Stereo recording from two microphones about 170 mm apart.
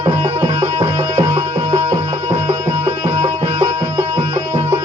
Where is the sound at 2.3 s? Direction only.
20° right (ahead or behind).